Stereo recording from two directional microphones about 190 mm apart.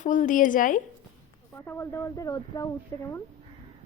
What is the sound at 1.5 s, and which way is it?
A woman's voice, 10° left (ahead or behind).